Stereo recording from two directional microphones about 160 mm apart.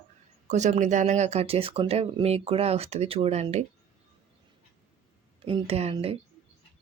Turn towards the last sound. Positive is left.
turn(degrees=-40)  # may be behind; listen again after turning